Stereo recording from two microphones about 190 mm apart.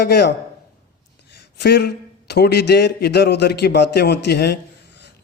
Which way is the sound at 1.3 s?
60° left (ahead or behind).